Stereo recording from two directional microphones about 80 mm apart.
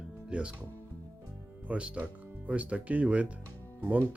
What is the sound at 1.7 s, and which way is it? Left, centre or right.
Speech, centre.